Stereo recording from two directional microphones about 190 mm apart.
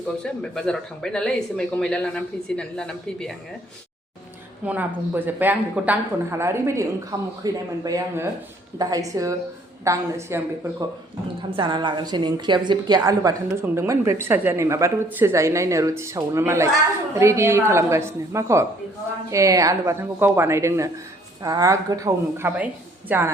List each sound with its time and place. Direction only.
0.2 s speech: 5° left (ahead or behind)
4.6 s a woman's voice: 10° right (ahead or behind)
11.5 s a woman's voice: 25° right (ahead or behind)